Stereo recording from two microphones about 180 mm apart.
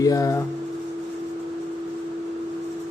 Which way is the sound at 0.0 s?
20° left (ahead or behind).